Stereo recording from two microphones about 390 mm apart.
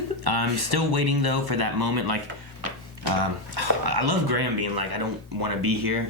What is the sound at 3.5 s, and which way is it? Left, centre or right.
Speech, right.